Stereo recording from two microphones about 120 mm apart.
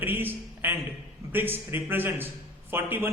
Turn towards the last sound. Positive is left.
turn(degrees=-20)  # may be behind; listen again after turning